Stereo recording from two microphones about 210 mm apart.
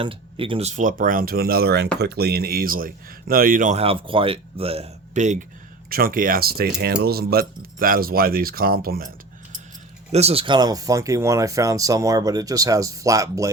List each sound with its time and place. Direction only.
0.0 s speech: 25° right (ahead or behind); by 9.0 s 45° right (ahead or behind)
10.1 s speech: 30° right (ahead or behind)